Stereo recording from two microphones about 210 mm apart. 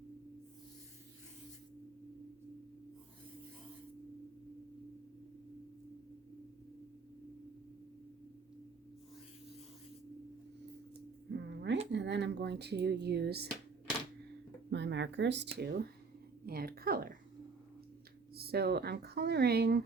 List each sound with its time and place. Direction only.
11.3 s a sound: 55° right (ahead or behind)
11.9 s speech: 55° right (ahead or behind)
14.7 s speech: 55° right (ahead or behind)
18.3 s speech: 50° right (ahead or behind)